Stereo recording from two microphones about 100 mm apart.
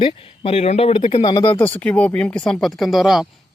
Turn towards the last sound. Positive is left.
turn(degrees=-5)  # may be behind; listen again after turning